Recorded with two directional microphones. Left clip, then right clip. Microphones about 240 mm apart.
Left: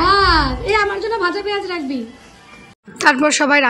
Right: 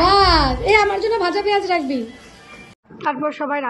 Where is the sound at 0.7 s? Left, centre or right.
Right.